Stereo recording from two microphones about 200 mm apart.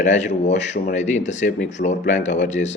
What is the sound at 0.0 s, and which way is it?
Speech, 35° left (ahead or behind).